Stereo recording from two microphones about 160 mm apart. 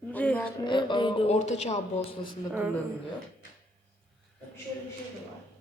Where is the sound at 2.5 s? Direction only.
10° right (ahead or behind).